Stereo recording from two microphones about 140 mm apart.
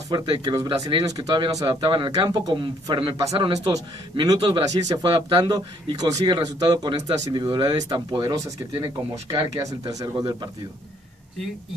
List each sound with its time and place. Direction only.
0.1 s a man's voice: 30° right (ahead or behind)